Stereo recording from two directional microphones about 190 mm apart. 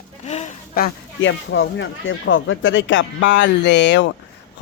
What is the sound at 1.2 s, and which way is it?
A man's voice, 70° left (ahead or behind).